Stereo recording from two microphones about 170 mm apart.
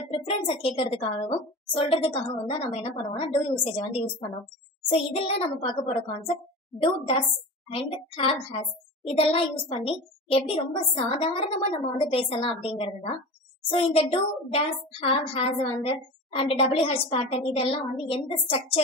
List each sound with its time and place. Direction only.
0.1 s a child's voice: 35° left (ahead or behind)